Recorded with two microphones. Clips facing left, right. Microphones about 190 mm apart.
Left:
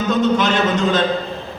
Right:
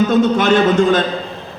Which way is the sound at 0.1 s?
50° right (ahead or behind).